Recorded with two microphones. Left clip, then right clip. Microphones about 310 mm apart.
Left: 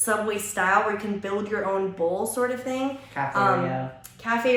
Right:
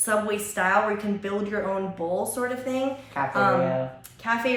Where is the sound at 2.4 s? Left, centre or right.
Centre.